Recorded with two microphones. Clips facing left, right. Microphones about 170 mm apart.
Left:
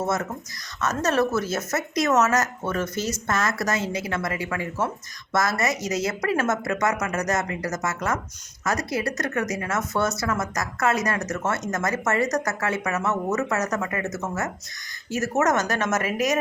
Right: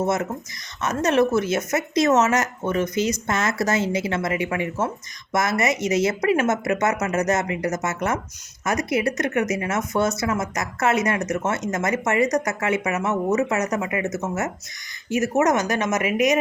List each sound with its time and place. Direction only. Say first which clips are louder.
0.0 s speech: right 3 dB; 20° right (ahead or behind)